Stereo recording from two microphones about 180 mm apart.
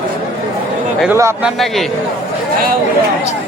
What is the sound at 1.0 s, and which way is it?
Speech, 15° right (ahead or behind).